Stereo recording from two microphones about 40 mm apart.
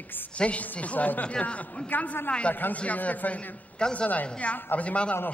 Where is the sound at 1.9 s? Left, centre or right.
Left.